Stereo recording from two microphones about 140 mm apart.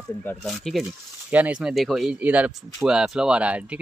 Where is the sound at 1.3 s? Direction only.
10° right (ahead or behind).